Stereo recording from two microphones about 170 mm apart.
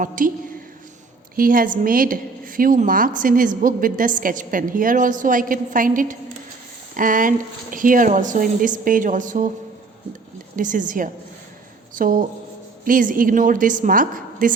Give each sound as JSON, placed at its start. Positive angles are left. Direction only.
{"t": 0.0, "sound": "a woman's voice", "side_deg": -50}
{"t": 1.4, "sound": "a woman's voice", "side_deg": -55}
{"t": 10.6, "sound": "a woman's voice", "side_deg": -50}